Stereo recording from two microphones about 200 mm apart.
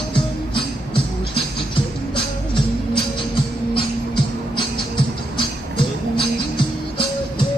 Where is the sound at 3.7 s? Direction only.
25° left (ahead or behind).